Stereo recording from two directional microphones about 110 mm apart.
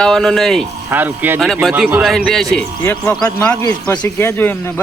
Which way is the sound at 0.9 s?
20° right (ahead or behind).